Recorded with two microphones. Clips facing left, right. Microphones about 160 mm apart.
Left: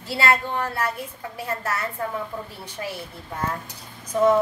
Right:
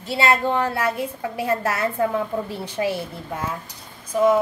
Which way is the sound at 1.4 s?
90° right.